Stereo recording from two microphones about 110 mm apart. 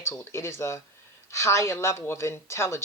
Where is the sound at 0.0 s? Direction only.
25° left (ahead or behind).